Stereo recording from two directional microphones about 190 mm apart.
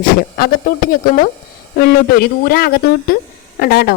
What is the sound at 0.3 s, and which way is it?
Speech, 50° left (ahead or behind).